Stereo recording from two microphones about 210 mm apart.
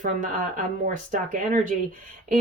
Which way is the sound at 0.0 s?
40° right (ahead or behind).